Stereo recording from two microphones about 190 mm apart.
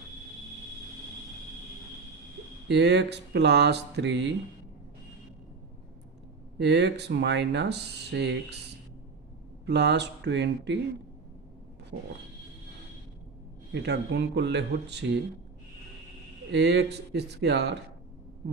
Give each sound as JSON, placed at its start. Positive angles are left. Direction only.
{"t": 2.7, "sound": "speech", "side_deg": -65}
{"t": 6.6, "sound": "speech", "side_deg": -65}
{"t": 9.7, "sound": "speech", "side_deg": -60}
{"t": 13.7, "sound": "speech", "side_deg": -60}
{"t": 16.5, "sound": "speech", "side_deg": -60}